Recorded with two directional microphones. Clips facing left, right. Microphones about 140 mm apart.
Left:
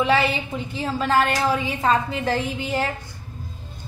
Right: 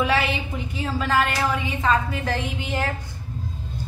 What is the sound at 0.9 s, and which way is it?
A woman's voice, 30° left (ahead or behind).